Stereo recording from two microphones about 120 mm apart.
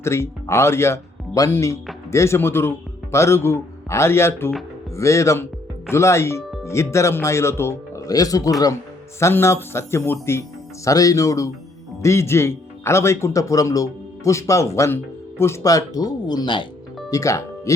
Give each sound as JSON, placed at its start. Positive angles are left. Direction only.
{"t": 0.0, "sound": "a man's voice", "side_deg": 20}
{"t": 17.1, "sound": "speech", "side_deg": 25}